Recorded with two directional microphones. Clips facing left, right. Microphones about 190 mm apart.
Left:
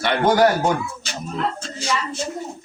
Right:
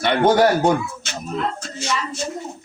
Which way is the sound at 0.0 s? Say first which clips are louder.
Right 2 dB; 25° right (ahead or behind).